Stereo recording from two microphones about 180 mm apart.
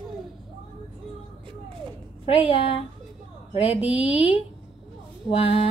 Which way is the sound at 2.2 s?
35° left (ahead or behind).